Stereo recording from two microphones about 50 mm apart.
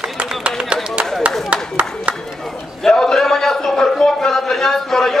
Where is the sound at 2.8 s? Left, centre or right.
Centre.